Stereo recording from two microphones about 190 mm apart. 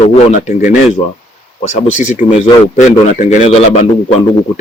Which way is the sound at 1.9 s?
40° left (ahead or behind).